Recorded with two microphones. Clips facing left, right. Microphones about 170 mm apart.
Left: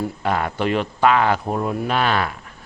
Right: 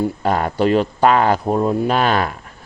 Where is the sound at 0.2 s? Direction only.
40° right (ahead or behind).